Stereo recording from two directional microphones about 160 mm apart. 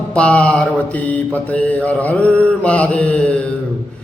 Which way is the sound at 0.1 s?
5° left (ahead or behind).